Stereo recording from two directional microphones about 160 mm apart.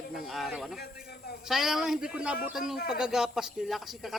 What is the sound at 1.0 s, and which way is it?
Speech, 80° left.